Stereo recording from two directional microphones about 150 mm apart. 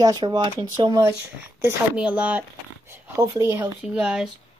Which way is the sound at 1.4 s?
10° right (ahead or behind).